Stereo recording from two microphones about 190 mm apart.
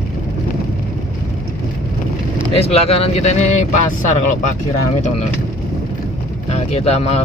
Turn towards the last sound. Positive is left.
turn(degrees=35)  # may be behind; listen again after turning